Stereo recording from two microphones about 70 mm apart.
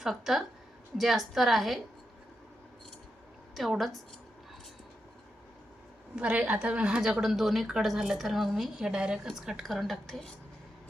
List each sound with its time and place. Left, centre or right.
0.0 s a woman's voice: centre
3.5 s a woman's voice: centre
6.1 s a woman's voice: centre
7.0 s a woman's voice: centre